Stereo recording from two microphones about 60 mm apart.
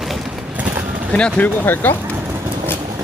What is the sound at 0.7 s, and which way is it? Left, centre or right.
Vehicle, right.